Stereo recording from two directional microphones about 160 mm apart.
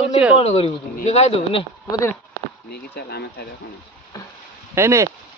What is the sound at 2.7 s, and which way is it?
Speech, 85° left.